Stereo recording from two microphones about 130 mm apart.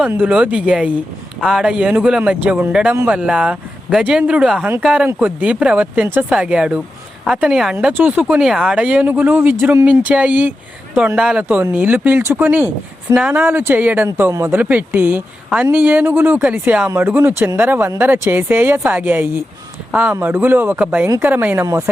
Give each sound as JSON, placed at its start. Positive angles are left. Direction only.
{"t": 0.1, "sound": "speech", "side_deg": -10}